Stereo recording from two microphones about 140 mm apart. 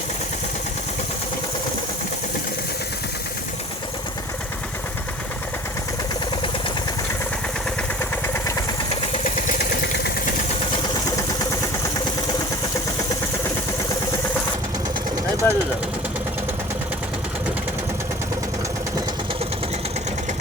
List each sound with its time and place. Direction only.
15.4 s speech: 15° left (ahead or behind)